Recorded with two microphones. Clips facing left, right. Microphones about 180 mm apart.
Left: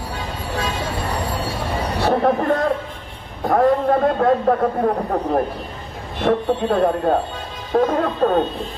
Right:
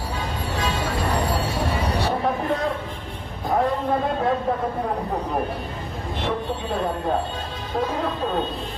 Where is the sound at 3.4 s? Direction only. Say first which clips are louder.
Left 6 dB; 60° left (ahead or behind).